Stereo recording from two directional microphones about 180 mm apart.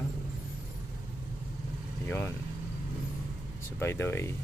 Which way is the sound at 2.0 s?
10° left (ahead or behind).